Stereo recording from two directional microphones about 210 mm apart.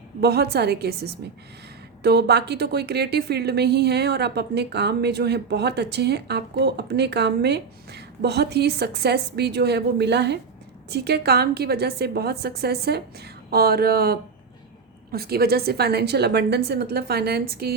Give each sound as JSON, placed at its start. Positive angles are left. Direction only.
{"t": 0.2, "sound": "a woman's voice", "side_deg": -50}